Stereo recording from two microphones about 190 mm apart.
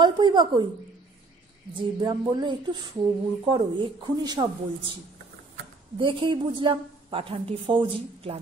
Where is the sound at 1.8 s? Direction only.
25° right (ahead or behind).